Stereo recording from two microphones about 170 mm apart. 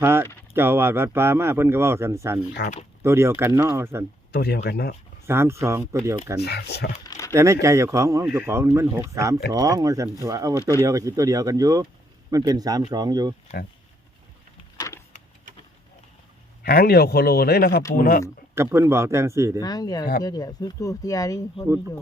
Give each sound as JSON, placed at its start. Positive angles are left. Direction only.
{"t": 0.0, "sound": "a sound", "side_deg": -15}
{"t": 0.5, "sound": "speech", "side_deg": -15}
{"t": 4.3, "sound": "speech", "side_deg": 65}
{"t": 5.2, "sound": "speech", "side_deg": -15}
{"t": 6.4, "sound": "speech", "side_deg": 75}
{"t": 7.0, "sound": "crumpling", "side_deg": 20}
{"t": 7.3, "sound": "speech", "side_deg": -15}
{"t": 10.6, "sound": "speech", "side_deg": 15}
{"t": 10.8, "sound": "speech", "side_deg": -20}
{"t": 16.6, "sound": "speech", "side_deg": 65}
{"t": 18.5, "sound": "speech", "side_deg": -15}
{"t": 19.5, "sound": "speech", "side_deg": 20}